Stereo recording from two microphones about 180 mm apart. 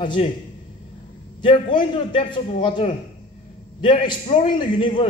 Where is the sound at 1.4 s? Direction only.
25° left (ahead or behind).